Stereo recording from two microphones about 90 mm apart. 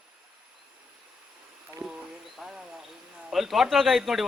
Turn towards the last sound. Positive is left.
turn(degrees=0)  # may be behind; listen again after turning